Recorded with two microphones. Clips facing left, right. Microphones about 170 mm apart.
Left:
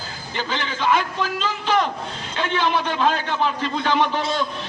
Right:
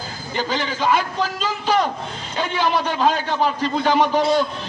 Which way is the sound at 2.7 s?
40° right (ahead or behind).